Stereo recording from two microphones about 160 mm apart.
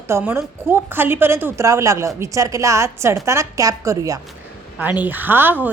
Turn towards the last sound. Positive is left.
turn(degrees=-10)  # may be behind; listen again after turning